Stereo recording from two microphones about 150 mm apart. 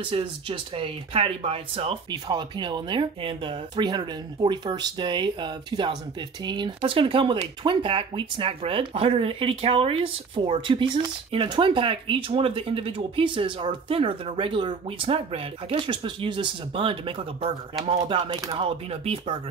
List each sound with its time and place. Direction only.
0.0 s speech: 35° right (ahead or behind)